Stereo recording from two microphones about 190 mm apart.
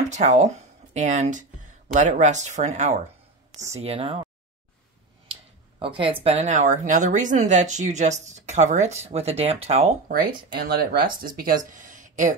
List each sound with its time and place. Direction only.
0.1 s speech: 40° right (ahead or behind)
5.3 s speech: 30° right (ahead or behind)
10.1 s speech: 55° right (ahead or behind)